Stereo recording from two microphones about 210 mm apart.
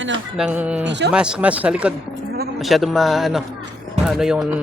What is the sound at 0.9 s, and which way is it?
Speech, 55° right (ahead or behind).